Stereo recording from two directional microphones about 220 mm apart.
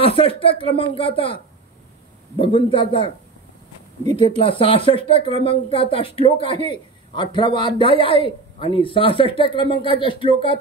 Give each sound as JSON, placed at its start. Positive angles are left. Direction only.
{"t": 0.0, "sound": "speech", "side_deg": 25}